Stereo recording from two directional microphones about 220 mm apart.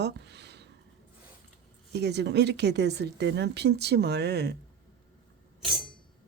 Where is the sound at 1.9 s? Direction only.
50° right (ahead or behind).